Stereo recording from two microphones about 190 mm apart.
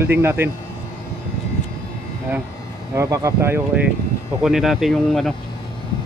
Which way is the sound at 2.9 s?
15° right (ahead or behind).